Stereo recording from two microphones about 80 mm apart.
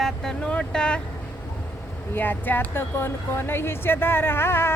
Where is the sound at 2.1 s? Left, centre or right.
Left.